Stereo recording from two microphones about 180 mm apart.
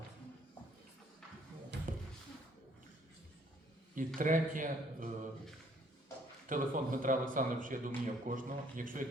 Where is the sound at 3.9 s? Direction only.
45° right (ahead or behind).